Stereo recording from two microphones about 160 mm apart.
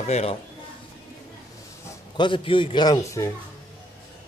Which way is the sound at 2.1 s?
30° left (ahead or behind).